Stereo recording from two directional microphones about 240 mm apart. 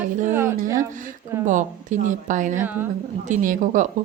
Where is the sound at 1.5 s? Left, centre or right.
Right.